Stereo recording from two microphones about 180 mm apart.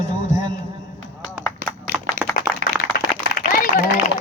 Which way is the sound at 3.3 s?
55° left (ahead or behind).